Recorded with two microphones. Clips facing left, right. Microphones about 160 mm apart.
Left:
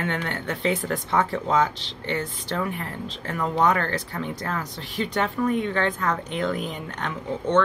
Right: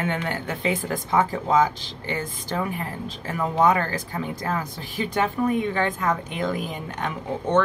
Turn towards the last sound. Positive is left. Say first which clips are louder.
# even
turn(degrees=-10)  # may be behind; listen again after turning